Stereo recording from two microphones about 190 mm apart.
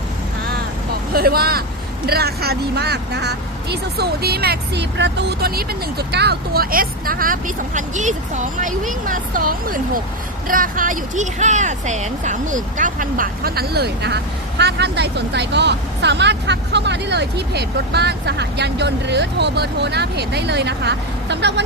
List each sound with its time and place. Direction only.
1.1 s speech: 55° right (ahead or behind)